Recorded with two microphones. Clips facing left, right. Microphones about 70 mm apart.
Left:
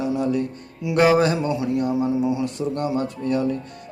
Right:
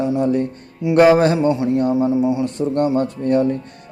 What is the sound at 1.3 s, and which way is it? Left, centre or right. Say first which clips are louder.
A man's voice: right 6 dB; right.